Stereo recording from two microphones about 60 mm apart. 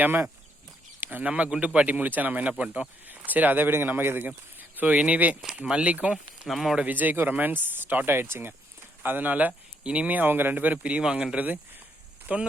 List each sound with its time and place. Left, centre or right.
0.0 s speech: right
1.2 s speech: right
4.8 s speech: right
6.5 s speech: centre
6.7 s speech: right
11.0 s speech: centre
11.3 s speech: right